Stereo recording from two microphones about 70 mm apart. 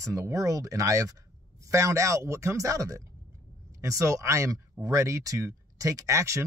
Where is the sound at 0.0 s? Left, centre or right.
Right.